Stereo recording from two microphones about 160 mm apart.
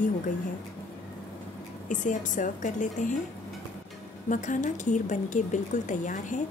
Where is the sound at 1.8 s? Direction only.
50° left (ahead or behind).